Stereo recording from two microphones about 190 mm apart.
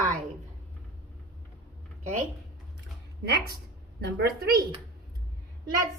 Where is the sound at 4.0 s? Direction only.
55° right (ahead or behind).